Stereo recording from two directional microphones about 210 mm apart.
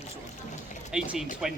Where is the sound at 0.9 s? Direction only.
5° right (ahead or behind).